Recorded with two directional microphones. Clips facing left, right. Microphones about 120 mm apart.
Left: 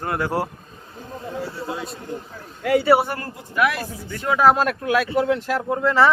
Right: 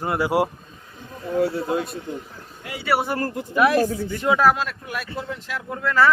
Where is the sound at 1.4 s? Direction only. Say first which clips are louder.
Right 6 dB; 55° right (ahead or behind).